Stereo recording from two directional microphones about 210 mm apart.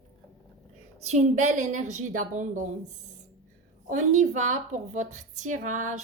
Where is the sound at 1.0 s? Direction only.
30° right (ahead or behind).